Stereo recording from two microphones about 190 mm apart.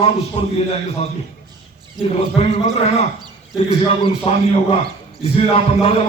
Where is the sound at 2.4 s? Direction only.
35° left (ahead or behind).